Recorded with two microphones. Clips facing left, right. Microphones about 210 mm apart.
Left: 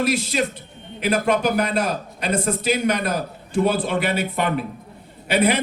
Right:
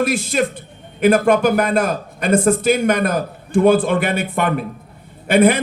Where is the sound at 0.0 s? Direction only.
50° right (ahead or behind).